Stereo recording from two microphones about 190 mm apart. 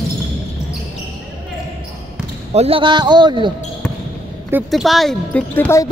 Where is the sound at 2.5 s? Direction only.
30° right (ahead or behind).